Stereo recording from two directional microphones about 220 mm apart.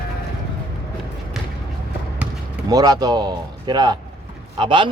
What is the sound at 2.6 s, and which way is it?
Speech, 15° right (ahead or behind).